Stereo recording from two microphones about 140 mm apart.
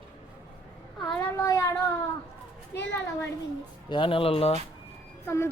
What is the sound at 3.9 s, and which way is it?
Speech, 35° left (ahead or behind).